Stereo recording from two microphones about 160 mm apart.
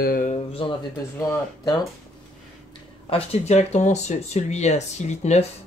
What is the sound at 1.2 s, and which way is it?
Speech, 25° left (ahead or behind).